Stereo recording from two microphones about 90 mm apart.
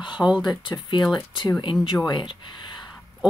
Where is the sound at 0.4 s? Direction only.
60° left (ahead or behind).